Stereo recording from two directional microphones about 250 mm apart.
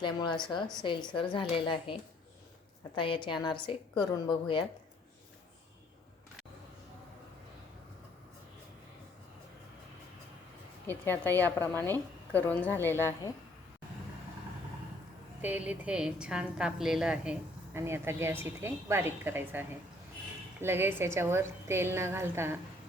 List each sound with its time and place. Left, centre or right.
0.0 s a woman's voice: centre
10.8 s a woman's voice: centre
15.4 s a woman's voice: centre